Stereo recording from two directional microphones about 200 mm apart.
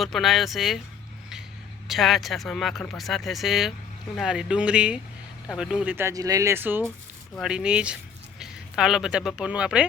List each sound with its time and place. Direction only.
0.0 s speech: centre (ahead or behind)
1.9 s speech: centre (ahead or behind)